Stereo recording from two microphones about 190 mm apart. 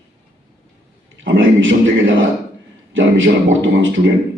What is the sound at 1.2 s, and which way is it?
A man's voice, 85° right.